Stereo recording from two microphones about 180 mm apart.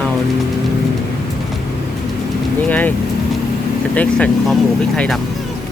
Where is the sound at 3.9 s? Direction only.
5° left (ahead or behind).